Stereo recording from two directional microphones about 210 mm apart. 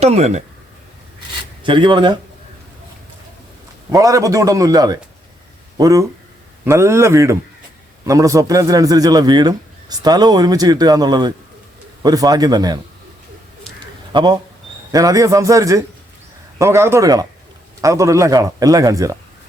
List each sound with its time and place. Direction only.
0.0 s speech: 30° right (ahead or behind)
1.6 s a man's voice: 25° right (ahead or behind)
3.9 s a man's voice: 15° right (ahead or behind)
13.7 s a sound: 20° right (ahead or behind)
14.9 s speech: 15° right (ahead or behind)